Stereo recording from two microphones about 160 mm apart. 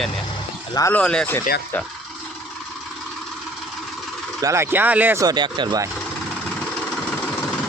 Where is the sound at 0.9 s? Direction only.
5° left (ahead or behind).